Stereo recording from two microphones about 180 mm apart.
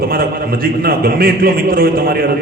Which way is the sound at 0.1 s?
55° right (ahead or behind).